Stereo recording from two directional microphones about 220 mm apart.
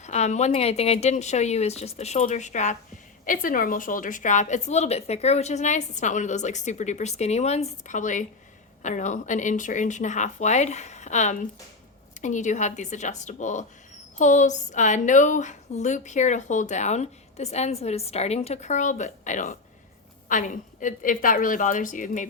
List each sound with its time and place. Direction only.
0.0 s a woman's voice: 30° left (ahead or behind)